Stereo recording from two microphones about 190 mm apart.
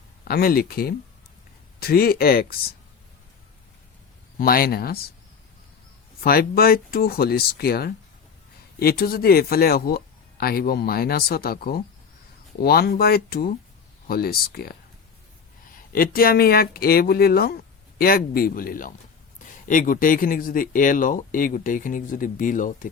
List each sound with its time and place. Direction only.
0.3 s speech: 50° left (ahead or behind)
4.4 s speech: 50° left (ahead or behind)
6.2 s speech: 55° left (ahead or behind)
15.9 s speech: 50° left (ahead or behind)